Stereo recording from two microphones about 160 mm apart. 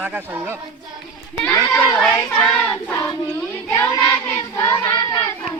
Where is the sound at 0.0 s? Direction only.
10° right (ahead or behind).